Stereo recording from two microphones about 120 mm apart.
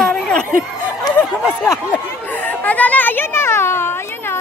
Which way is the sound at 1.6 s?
20° left (ahead or behind).